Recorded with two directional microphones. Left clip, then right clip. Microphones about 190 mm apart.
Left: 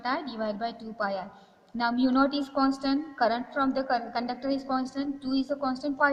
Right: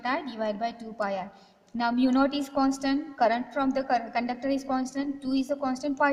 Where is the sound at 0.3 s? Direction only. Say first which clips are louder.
Right 2 dB; 30° right (ahead or behind).